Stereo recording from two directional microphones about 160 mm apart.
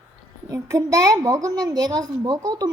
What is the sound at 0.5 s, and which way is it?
Speech, 20° right (ahead or behind).